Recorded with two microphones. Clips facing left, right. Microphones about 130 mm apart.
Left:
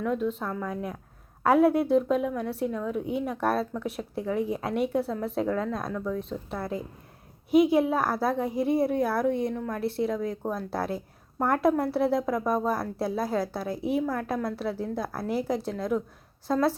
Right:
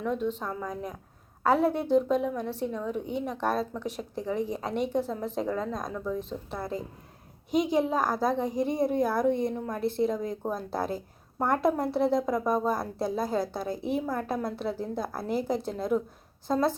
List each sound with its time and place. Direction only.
0.0 s a woman's voice: 5° left (ahead or behind)